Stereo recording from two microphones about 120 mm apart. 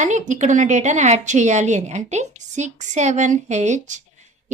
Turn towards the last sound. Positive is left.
turn(degrees=-85)